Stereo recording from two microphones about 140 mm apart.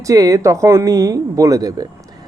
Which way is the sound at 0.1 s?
25° right (ahead or behind).